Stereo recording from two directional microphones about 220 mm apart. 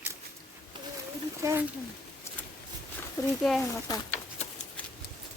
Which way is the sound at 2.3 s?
10° left (ahead or behind).